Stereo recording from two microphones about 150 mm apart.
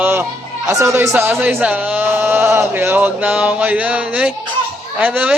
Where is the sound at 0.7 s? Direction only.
20° right (ahead or behind).